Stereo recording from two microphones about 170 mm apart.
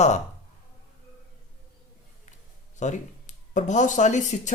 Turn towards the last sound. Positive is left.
turn(degrees=45)  # may be behind; listen again after turning